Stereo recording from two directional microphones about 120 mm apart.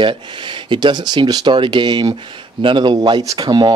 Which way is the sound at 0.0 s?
40° right (ahead or behind).